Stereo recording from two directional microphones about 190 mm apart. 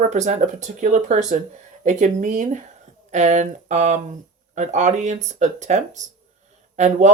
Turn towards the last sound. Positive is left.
turn(degrees=-40)  # may be behind; listen again after turning